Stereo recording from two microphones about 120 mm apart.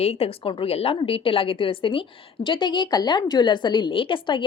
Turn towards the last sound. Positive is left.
turn(degrees=40)  # may be behind; listen again after turning